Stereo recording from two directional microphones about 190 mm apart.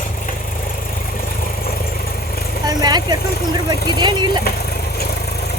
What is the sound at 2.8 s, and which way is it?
Speech, 20° right (ahead or behind).